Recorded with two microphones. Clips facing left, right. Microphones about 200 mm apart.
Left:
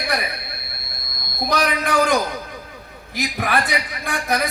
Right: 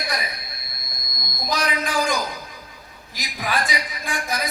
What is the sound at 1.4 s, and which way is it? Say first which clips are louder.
Speech: left 4 dB; 60° left (ahead or behind).